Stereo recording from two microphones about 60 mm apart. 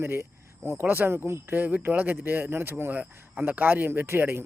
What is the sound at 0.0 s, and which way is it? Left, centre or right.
Speech, right.